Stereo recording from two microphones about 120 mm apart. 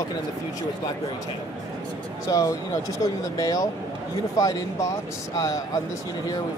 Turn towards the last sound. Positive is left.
turn(degrees=30)  # may be behind; listen again after turning